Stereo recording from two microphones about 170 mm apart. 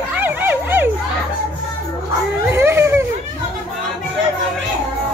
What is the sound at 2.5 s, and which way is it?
Dog, 15° right (ahead or behind).